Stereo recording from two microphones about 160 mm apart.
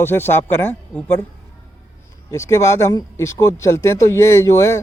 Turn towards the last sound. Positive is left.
turn(degrees=15)  # may be behind; listen again after turning